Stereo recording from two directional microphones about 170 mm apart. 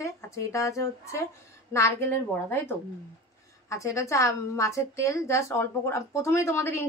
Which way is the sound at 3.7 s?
20° left (ahead or behind).